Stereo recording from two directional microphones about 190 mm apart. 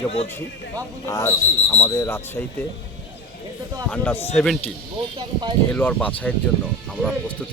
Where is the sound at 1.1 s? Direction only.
15° left (ahead or behind).